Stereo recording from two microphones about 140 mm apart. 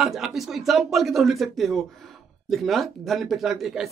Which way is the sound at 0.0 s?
Centre (ahead or behind).